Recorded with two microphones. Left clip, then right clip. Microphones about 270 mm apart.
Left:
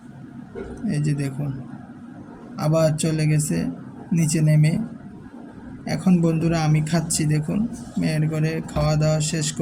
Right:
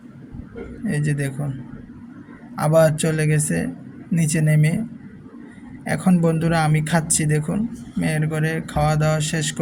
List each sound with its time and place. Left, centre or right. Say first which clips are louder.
0.9 s speech: right 2 dB; centre
2.6 s speech: right 5 dB; centre
5.8 s speech: right 2 dB; centre